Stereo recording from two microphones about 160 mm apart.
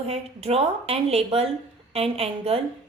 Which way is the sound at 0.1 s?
40° right (ahead or behind).